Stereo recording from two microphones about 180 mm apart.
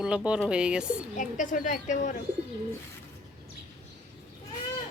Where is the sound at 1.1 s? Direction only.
45° left (ahead or behind).